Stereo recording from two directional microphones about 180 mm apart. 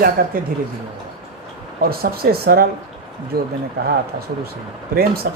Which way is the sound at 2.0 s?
60° right (ahead or behind).